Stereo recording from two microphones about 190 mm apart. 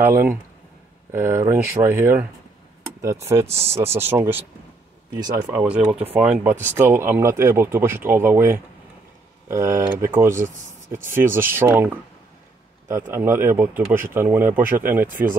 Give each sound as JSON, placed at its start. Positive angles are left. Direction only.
{"t": 1.1, "sound": "speech", "side_deg": -15}
{"t": 3.4, "sound": "speech", "side_deg": -35}
{"t": 3.7, "sound": "speech", "side_deg": -15}
{"t": 5.1, "sound": "speech", "side_deg": -20}
{"t": 5.6, "sound": "speech", "side_deg": -5}